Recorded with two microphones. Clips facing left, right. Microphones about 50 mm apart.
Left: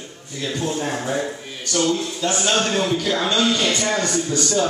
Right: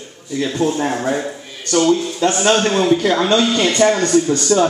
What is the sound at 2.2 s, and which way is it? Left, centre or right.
A man's voice, right.